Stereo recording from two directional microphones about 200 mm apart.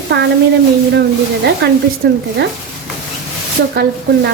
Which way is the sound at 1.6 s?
55° right (ahead or behind).